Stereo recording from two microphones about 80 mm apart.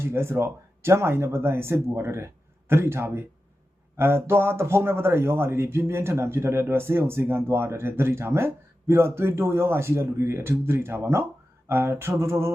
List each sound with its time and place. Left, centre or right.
0.0 s a man's voice: right